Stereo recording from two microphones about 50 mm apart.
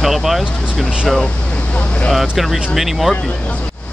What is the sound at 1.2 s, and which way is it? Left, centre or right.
Speech, left.